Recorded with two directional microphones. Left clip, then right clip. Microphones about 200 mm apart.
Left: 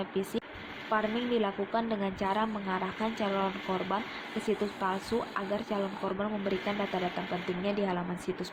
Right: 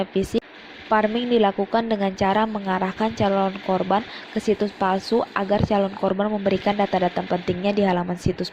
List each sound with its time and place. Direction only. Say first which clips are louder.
0.0 s speech: right 10 dB; 30° right (ahead or behind)